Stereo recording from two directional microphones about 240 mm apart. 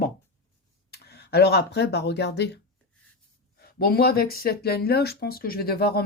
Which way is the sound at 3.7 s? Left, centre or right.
Left.